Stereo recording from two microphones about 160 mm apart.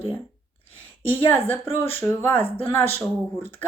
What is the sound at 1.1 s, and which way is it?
Speech, 10° left (ahead or behind).